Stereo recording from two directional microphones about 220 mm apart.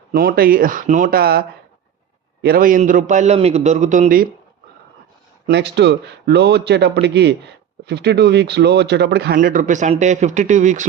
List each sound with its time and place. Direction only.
0.1 s a man's voice: 40° right (ahead or behind)
5.5 s speech: 50° right (ahead or behind); by 10.8 s 35° right (ahead or behind)